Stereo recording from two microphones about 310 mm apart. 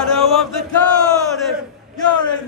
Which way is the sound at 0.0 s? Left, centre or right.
Centre.